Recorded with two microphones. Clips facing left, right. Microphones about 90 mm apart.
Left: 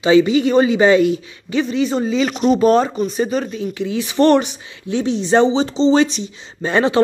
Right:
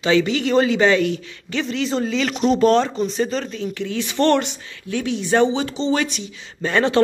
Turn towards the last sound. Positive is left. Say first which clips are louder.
# left 3 dB
turn(degrees=15)  # may be behind; listen again after turning